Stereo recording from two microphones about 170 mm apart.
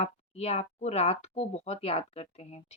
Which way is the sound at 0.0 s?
40° left (ahead or behind).